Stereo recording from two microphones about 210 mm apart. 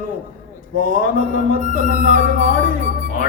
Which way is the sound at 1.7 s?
40° left (ahead or behind).